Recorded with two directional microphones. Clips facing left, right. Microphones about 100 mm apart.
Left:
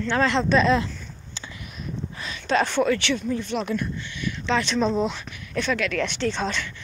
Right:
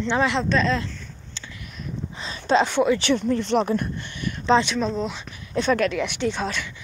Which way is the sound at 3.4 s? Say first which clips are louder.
Right 6 dB; 65° right (ahead or behind).